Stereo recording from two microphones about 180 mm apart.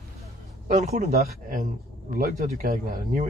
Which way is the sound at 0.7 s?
50° right (ahead or behind).